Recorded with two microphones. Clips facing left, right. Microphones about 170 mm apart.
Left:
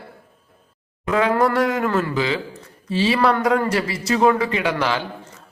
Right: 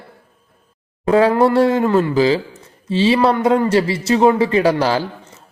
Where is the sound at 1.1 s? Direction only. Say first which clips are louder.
Right 5 dB; 30° right (ahead or behind).